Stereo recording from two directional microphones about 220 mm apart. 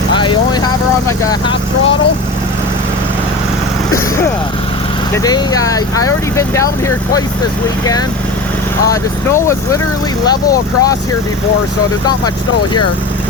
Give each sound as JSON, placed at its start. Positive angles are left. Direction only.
{"t": 0.2, "sound": "vehicle", "side_deg": 20}
{"t": 5.1, "sound": "speech", "side_deg": 15}
{"t": 8.9, "sound": "speech", "side_deg": 15}